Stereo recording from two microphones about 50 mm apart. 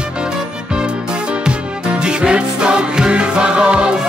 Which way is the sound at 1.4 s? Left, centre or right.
Centre.